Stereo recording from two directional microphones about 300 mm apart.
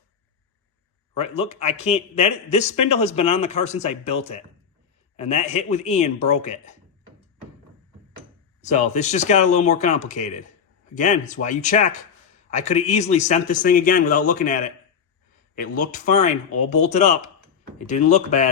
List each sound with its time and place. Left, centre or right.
1.1 s a man's voice: left
8.7 s a man's voice: left